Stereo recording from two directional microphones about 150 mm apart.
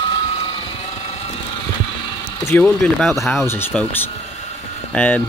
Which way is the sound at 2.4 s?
15° left (ahead or behind).